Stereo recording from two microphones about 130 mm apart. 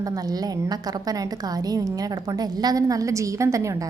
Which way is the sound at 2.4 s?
30° right (ahead or behind).